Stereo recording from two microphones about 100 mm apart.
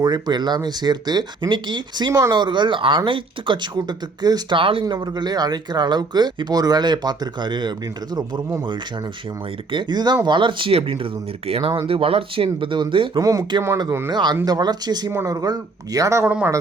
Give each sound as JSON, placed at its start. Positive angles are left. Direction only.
{"t": 0.0, "sound": "speech", "side_deg": -45}
{"t": 8.1, "sound": "speech", "side_deg": -35}
{"t": 9.7, "sound": "speech", "side_deg": -45}
{"t": 13.1, "sound": "speech", "side_deg": -35}
{"t": 14.1, "sound": "speech", "side_deg": -45}